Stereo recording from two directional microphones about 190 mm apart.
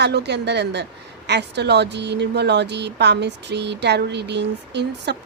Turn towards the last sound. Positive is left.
turn(degrees=-65)  # may be behind; listen again after turning